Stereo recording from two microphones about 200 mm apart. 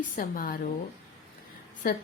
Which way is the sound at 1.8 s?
45° left (ahead or behind).